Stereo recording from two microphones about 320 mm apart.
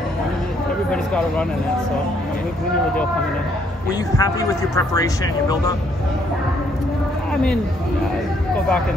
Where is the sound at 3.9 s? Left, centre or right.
Centre.